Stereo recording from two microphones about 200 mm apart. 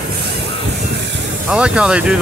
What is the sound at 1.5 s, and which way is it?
Speech, 5° right (ahead or behind).